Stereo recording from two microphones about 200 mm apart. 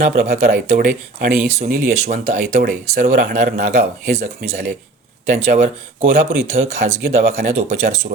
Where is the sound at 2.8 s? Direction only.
40° right (ahead or behind).